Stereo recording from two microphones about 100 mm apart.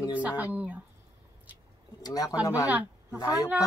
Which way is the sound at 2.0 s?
40° left (ahead or behind).